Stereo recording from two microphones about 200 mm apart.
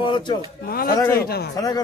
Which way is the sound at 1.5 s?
20° left (ahead or behind).